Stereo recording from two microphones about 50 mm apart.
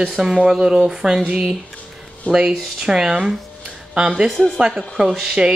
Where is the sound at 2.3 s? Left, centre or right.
Centre.